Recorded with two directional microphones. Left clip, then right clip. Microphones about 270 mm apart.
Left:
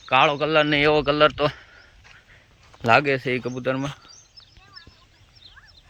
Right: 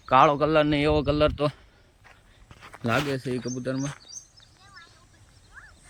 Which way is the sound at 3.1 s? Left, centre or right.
Centre.